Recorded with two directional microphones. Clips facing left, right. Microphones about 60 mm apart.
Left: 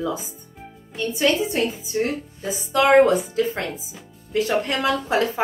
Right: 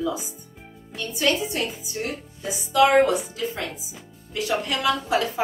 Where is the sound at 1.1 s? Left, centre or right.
Left.